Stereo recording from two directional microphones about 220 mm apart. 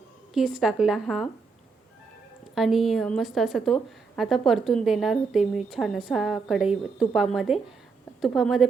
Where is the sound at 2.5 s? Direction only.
Centre (ahead or behind).